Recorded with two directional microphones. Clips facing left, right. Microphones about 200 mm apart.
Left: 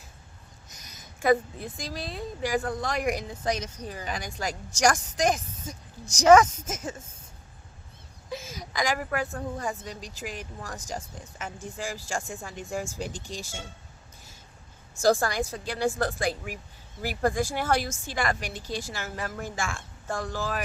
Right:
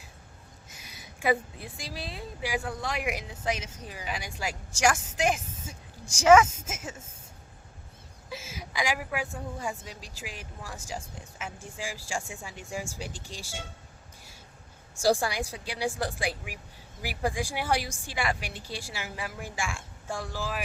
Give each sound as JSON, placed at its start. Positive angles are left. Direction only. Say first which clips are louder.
{"t": 0.7, "sound": "a sound", "louder": "right 1 dB", "side_deg": 40}
{"t": 1.6, "sound": "a woman's voice", "louder": "left 4 dB", "side_deg": -10}
{"t": 3.2, "sound": "speech", "louder": "left 3 dB", "side_deg": 40}
{"t": 3.8, "sound": "a woman's voice", "louder": "even", "side_deg": -5}
{"t": 5.1, "sound": "a woman's voice", "louder": "left 2 dB", "side_deg": 40}
{"t": 6.2, "sound": "a woman's voice", "louder": "left 2 dB", "side_deg": -5}
{"t": 6.7, "sound": "speech", "louder": "left 5 dB", "side_deg": 40}
{"t": 8.3, "sound": "a woman's voice", "louder": "left 3 dB", "side_deg": -5}
{"t": 15.0, "sound": "a woman's voice", "louder": "left 2 dB", "side_deg": -10}
{"t": 18.3, "sound": "a woman's voice", "louder": "left 3 dB", "side_deg": 45}
{"t": 18.7, "sound": "a woman's voice", "louder": "left 5 dB", "side_deg": -10}